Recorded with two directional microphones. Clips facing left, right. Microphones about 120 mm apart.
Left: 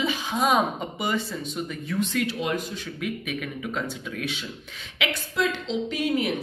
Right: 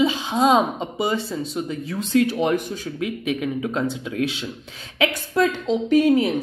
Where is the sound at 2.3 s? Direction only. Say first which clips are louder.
Right 7 dB; 60° right (ahead or behind).